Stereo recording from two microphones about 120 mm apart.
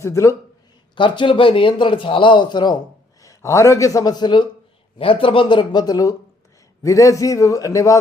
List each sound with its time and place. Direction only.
0.0 s a man's voice: 25° left (ahead or behind)
0.9 s a man's voice: 45° left (ahead or behind)
3.2 s a man's voice: 25° left (ahead or behind)
4.9 s a man's voice: 50° left (ahead or behind); by 7.9 s 30° left (ahead or behind)